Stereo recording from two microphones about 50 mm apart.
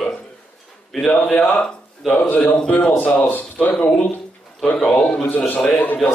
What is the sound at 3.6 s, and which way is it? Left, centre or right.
Speech, centre.